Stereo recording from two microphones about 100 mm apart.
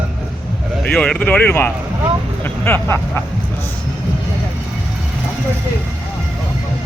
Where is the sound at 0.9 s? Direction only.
10° left (ahead or behind); by 3.2 s 25° left (ahead or behind).